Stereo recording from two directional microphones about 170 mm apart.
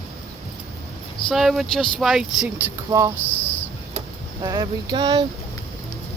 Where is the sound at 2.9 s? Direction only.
20° right (ahead or behind).